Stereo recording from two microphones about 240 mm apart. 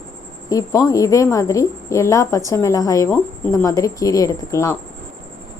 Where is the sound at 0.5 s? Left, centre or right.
Centre.